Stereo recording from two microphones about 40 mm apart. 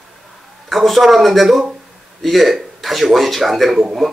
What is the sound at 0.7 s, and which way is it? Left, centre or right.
Speech, centre.